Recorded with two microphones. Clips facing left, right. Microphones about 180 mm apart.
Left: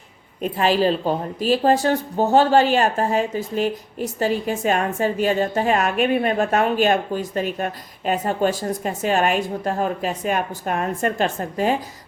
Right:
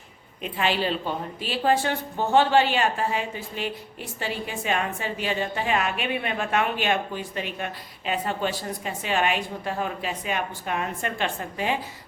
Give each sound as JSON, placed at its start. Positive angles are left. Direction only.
{"t": 0.4, "sound": "speech", "side_deg": 40}